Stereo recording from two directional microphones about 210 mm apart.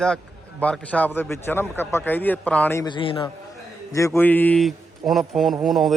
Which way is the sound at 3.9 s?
15° left (ahead or behind).